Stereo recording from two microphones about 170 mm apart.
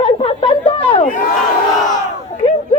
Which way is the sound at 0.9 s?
35° left (ahead or behind).